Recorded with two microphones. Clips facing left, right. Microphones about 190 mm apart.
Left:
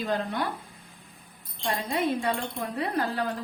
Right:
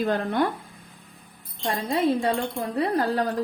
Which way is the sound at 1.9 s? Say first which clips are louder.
Right 5 dB; 35° right (ahead or behind).